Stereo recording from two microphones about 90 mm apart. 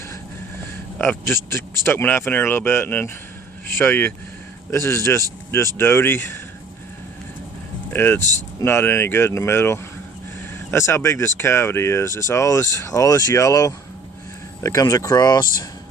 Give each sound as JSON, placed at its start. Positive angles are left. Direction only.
{"t": 1.0, "sound": "speech", "side_deg": 25}
{"t": 7.9, "sound": "speech", "side_deg": 25}